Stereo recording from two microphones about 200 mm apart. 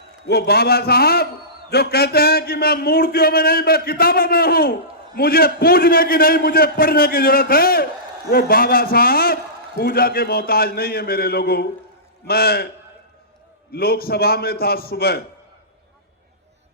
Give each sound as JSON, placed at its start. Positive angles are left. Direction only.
{"t": 0.3, "sound": "speech", "side_deg": 55}
{"t": 13.7, "sound": "speech", "side_deg": 50}